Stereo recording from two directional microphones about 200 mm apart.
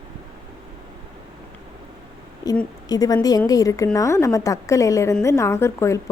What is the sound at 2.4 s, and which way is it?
A woman's voice, 20° left (ahead or behind).